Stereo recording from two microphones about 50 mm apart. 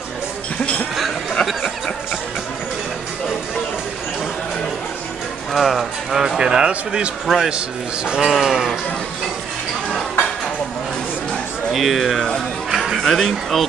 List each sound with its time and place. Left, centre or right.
1.4 s a sound: centre
5.5 s speech: centre
6.2 s a man's voice: centre
7.2 s speech: centre
7.5 s a man's voice: centre
11.7 s speech: centre